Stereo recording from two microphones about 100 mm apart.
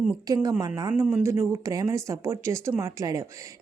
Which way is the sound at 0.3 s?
35° right (ahead or behind).